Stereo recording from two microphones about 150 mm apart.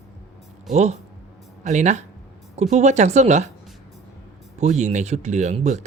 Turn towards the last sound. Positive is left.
turn(degrees=-50)  # may be behind; listen again after turning